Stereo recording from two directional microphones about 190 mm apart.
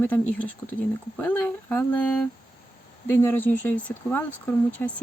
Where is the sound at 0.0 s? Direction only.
10° left (ahead or behind).